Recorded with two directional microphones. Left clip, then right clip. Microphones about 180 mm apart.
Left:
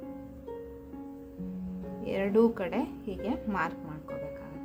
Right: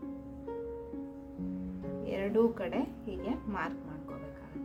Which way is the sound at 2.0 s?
30° left (ahead or behind).